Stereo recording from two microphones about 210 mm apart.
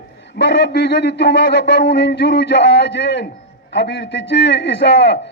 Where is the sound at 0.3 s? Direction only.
50° left (ahead or behind).